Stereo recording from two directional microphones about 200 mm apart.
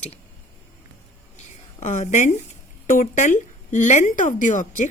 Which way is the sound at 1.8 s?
40° left (ahead or behind).